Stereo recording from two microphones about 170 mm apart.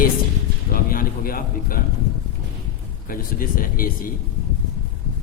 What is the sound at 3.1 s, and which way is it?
Speech, 55° left (ahead or behind).